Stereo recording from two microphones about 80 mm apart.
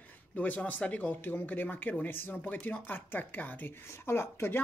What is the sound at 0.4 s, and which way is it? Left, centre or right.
Speech, left.